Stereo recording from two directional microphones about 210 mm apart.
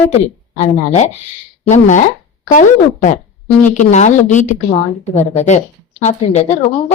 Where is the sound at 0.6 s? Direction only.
35° left (ahead or behind).